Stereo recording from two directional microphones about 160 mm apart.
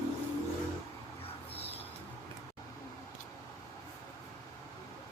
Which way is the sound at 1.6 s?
40° left (ahead or behind).